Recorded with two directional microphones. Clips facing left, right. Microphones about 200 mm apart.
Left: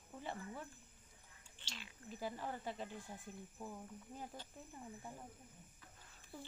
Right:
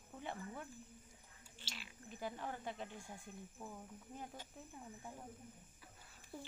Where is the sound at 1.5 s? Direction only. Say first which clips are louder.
Even; 10° right (ahead or behind).